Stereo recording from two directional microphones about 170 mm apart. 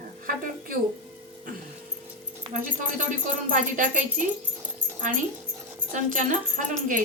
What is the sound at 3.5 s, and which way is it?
Speech, 50° right (ahead or behind).